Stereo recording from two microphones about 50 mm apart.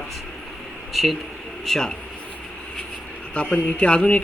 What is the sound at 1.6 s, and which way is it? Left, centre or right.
Speech, centre.